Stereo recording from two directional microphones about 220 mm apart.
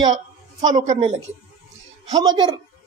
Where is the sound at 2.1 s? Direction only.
20° right (ahead or behind).